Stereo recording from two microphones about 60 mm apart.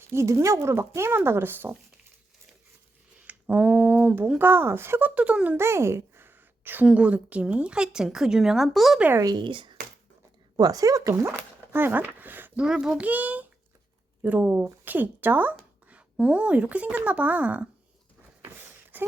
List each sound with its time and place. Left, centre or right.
0.1 s speech: right
3.2 s a sound: right
4.4 s speech: right
5.5 s a sound: right
6.8 s a woman's voice: right; by 9.0 s centre
10.7 s speech: right
11.3 s speech: right
12.5 s a woman's voice: centre
13.0 s speech: right
16.0 s speech: centre
18.4 s a sound: right